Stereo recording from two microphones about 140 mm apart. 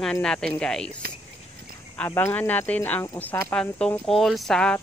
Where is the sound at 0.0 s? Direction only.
5° left (ahead or behind).